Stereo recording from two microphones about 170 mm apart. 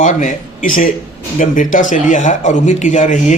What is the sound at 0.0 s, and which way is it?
Speech, 50° left (ahead or behind).